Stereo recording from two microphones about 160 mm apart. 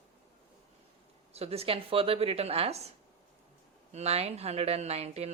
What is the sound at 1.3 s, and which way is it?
Speech, 40° right (ahead or behind).